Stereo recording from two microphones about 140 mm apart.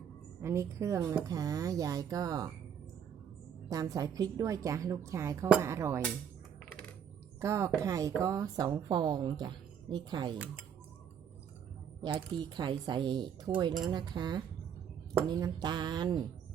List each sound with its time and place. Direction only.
0.4 s speech: 20° right (ahead or behind)
3.7 s speech: 25° right (ahead or behind)
7.4 s speech: 20° right (ahead or behind)
10.3 s speech: 10° right (ahead or behind)
12.0 s speech: 30° right (ahead or behind)